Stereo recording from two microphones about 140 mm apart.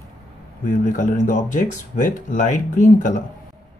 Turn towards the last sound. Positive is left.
turn(degrees=60)  # may be behind; listen again after turning